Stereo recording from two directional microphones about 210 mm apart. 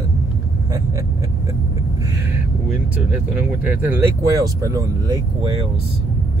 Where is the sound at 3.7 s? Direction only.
10° right (ahead or behind).